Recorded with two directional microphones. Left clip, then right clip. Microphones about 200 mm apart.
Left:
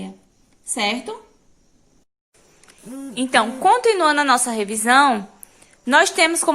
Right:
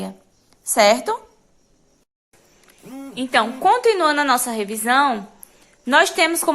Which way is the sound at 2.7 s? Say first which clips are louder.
Left 1 dB; 10° left (ahead or behind).